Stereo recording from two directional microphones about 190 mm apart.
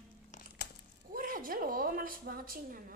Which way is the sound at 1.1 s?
50° right (ahead or behind).